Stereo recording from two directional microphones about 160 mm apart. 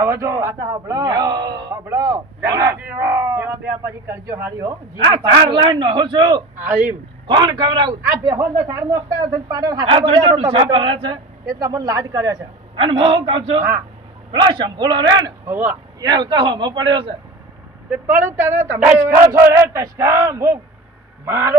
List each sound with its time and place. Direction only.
0.0 s a man's voice: 20° right (ahead or behind)
6.7 s speech: 10° right (ahead or behind)
7.3 s a man's voice: 30° right (ahead or behind)
10.3 s a woman's voice: 35° right (ahead or behind)
11.4 s a man's voice: 20° right (ahead or behind)
12.7 s a woman's voice: 35° right (ahead or behind)
15.5 s speech: 10° right (ahead or behind)
16.0 s a man's voice: 25° right (ahead or behind)
17.9 s speech: 10° right (ahead or behind)